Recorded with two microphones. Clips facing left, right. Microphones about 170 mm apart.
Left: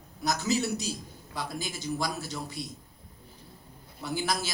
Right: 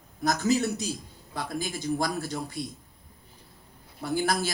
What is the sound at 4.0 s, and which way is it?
Speech, 55° right (ahead or behind).